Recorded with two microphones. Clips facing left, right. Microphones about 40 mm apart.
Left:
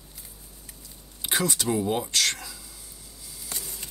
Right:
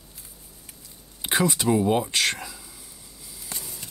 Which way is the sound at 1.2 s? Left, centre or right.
Centre.